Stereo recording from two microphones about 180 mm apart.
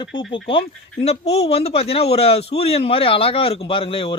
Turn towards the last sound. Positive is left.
turn(degrees=30)  # may be behind; listen again after turning